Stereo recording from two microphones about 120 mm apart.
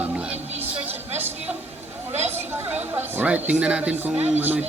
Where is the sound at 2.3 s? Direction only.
15° right (ahead or behind).